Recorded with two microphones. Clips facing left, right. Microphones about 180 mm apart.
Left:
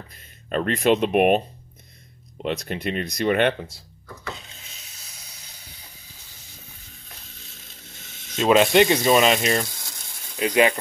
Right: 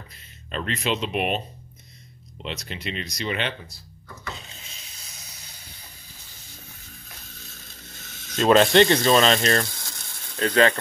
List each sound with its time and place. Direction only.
0.5 s speech: 50° left (ahead or behind)
2.4 s speech: 50° left (ahead or behind)
8.0 s a sound: 20° left (ahead or behind)
8.4 s speech: 5° left (ahead or behind)